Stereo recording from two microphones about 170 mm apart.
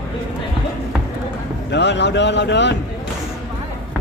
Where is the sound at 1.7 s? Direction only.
90° left.